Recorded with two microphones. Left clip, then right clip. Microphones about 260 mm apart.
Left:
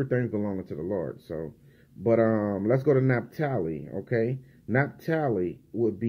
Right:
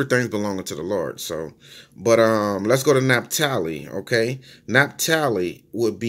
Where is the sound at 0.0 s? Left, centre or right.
Centre.